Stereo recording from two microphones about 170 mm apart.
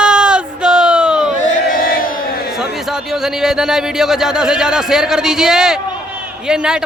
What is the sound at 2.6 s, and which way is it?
A man's voice, centre (ahead or behind).